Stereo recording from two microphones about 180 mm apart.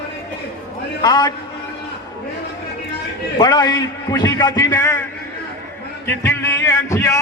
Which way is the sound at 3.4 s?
20° left (ahead or behind).